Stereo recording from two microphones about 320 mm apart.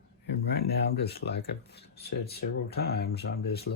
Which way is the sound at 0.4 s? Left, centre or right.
Left.